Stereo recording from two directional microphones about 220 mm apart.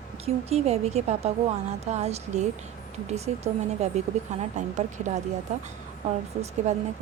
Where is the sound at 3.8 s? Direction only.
30° right (ahead or behind).